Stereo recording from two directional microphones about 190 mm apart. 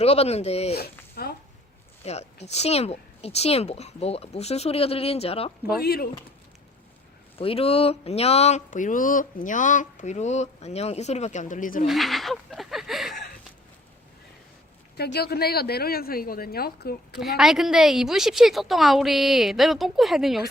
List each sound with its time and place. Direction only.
0.0 s speech: 35° left (ahead or behind)
1.1 s speech: 55° left (ahead or behind)
2.0 s speech: 35° left (ahead or behind)
5.8 s speech: 55° left (ahead or behind)
7.3 s speech: 30° left (ahead or behind)
11.9 s speech: centre (ahead or behind)
14.9 s speech: 55° left (ahead or behind)
17.2 s a woman's voice: centre (ahead or behind)